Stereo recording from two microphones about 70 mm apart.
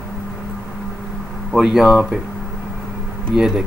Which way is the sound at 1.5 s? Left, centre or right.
Centre.